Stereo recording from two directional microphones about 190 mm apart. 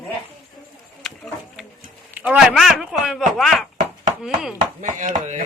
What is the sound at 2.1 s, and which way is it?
Speech, 10° right (ahead or behind).